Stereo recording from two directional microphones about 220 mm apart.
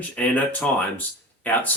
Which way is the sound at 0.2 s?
5° left (ahead or behind).